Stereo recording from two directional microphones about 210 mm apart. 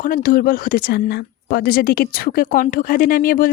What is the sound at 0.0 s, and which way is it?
A woman's voice, 45° left (ahead or behind).